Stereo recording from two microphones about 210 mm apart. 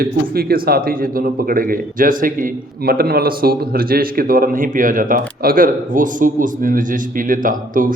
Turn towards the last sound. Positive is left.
turn(degrees=-40)  # may be behind; listen again after turning